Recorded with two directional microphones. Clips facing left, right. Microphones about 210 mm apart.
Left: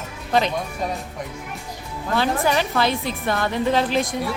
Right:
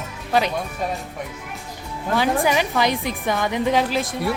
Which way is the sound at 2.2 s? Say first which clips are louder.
Right 1 dB; 15° right (ahead or behind).